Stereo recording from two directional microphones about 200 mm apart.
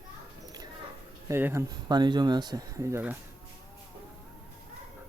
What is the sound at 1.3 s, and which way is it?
Speech, 10° right (ahead or behind).